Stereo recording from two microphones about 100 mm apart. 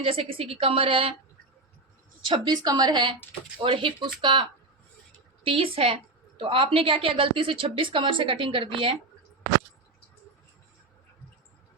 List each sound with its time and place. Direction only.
0.0 s a woman's voice: 70° right (ahead or behind)
2.2 s a woman's voice: 50° right (ahead or behind)